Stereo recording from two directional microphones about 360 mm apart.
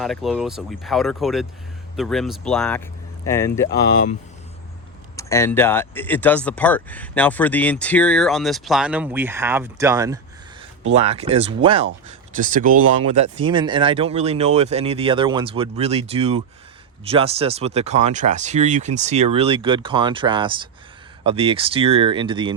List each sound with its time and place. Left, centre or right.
0.0 s speech: centre
5.1 s speech: centre